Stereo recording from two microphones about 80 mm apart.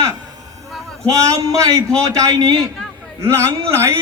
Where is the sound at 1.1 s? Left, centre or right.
Right.